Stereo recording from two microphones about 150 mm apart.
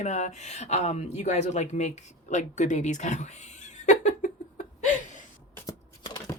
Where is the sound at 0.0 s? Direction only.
50° left (ahead or behind).